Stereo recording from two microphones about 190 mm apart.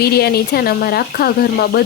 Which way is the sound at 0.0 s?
55° left (ahead or behind).